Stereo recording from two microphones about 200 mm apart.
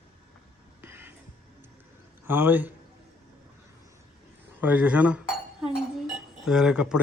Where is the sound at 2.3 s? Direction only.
10° right (ahead or behind).